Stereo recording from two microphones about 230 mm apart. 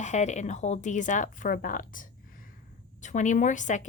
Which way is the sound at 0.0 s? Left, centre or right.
Left.